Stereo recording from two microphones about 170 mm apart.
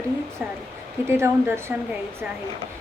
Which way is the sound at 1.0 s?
15° right (ahead or behind).